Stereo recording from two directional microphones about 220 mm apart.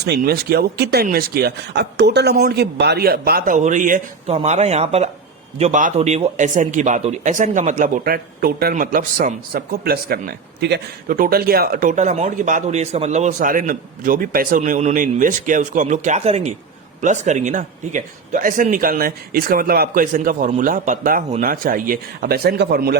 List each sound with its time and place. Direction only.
0.0 s speech: 45° right (ahead or behind)